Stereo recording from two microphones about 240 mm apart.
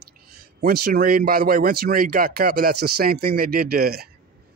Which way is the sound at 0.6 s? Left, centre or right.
Right.